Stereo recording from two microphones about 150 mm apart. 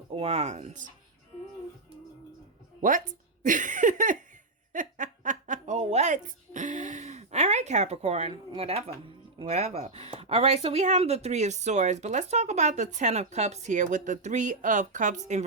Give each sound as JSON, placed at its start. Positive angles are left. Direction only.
{"t": 0.1, "sound": "speech", "side_deg": -45}
{"t": 3.4, "sound": "a sound", "side_deg": -60}
{"t": 4.7, "sound": "giggle", "side_deg": -60}
{"t": 8.3, "sound": "speech", "side_deg": -40}